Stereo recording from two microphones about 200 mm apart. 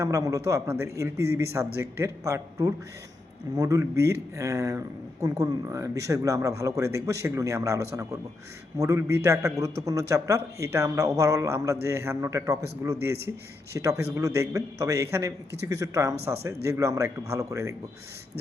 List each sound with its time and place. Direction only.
0.0 s a man's voice: 15° right (ahead or behind)